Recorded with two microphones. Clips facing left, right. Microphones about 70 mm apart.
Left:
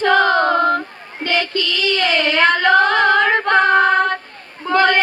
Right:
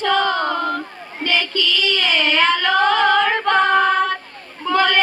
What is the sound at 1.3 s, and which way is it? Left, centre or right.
Child singing, left.